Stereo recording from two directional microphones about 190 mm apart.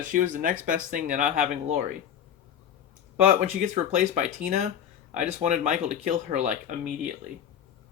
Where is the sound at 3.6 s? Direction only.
40° right (ahead or behind).